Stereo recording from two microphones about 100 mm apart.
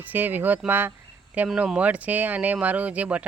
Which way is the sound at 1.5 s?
10° right (ahead or behind).